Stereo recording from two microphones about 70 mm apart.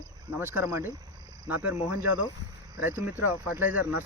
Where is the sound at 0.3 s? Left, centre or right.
Right.